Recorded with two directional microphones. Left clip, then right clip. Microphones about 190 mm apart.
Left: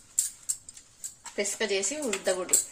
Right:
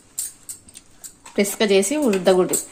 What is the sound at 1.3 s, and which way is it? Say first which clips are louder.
Speech: right 11 dB; 60° right (ahead or behind).